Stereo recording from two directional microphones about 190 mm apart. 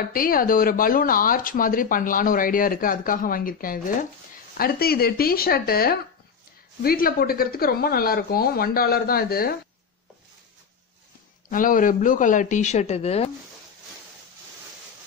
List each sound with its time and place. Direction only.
0.1 s speech: 50° left (ahead or behind)
11.5 s speech: 45° left (ahead or behind)